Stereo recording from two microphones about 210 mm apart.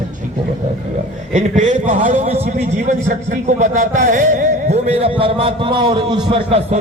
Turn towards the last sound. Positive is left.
turn(degrees=-25)  # may be behind; listen again after turning